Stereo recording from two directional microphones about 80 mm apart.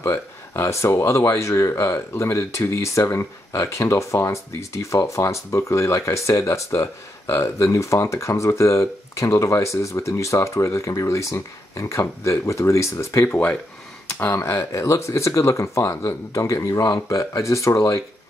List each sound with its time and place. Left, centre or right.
0.0 s speech: left
13.2 s speech: left
14.2 s speech: left